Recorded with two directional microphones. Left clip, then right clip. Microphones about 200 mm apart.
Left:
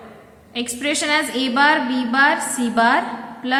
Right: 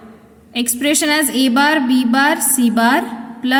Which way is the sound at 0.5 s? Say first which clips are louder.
Right 5 dB; 45° right (ahead or behind).